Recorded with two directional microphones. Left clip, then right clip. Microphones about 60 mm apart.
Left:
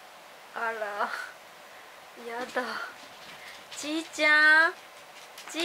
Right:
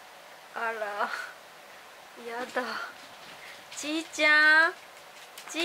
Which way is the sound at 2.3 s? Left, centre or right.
Centre.